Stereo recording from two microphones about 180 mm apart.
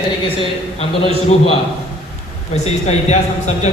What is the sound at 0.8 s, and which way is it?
Speech, 35° left (ahead or behind).